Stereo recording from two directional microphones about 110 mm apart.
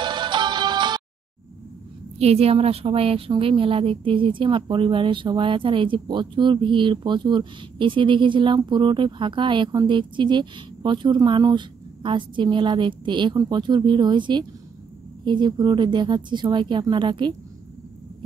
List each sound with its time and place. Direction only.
0.0 s music: 45° right (ahead or behind)
2.1 s speech: 70° right (ahead or behind); by 17.3 s 45° right (ahead or behind)